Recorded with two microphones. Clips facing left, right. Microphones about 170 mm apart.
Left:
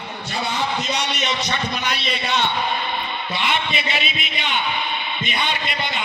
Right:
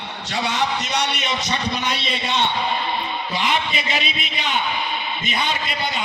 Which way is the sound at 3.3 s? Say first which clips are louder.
Right 1 dB; 40° right (ahead or behind).